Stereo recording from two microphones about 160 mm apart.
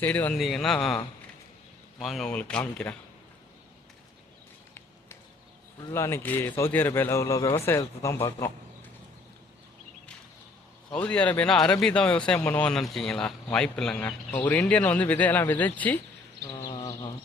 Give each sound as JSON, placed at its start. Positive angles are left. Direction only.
{"t": 0.0, "sound": "a man's voice", "side_deg": 10}
{"t": 2.0, "sound": "speech", "side_deg": 0}
{"t": 5.9, "sound": "a man's voice", "side_deg": 15}
{"t": 10.9, "sound": "a man's voice", "side_deg": 10}
{"t": 16.6, "sound": "a sound", "side_deg": 25}